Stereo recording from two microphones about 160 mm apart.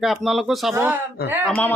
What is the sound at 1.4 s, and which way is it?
Speech, 10° left (ahead or behind).